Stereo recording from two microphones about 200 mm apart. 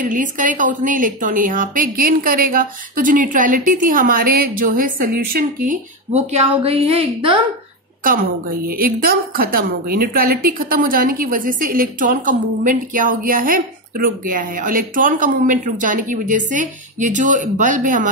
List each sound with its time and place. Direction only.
0.0 s a woman's voice: 40° right (ahead or behind)
8.0 s a woman's voice: 45° right (ahead or behind)